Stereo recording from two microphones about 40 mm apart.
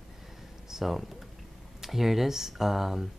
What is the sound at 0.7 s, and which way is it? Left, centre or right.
Speech, centre.